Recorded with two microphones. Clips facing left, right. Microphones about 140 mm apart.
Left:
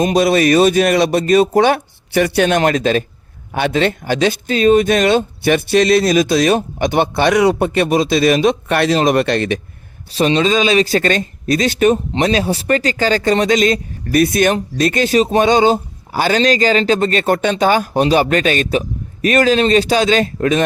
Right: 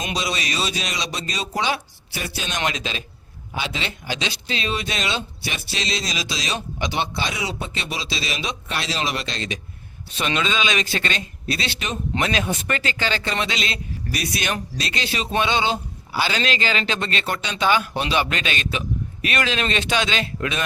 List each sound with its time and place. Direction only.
0.0 s speech: 50° left (ahead or behind)
2.6 s speech: 50° left (ahead or behind)
10.1 s speech: 35° left (ahead or behind)
12.2 s speech: 35° left (ahead or behind)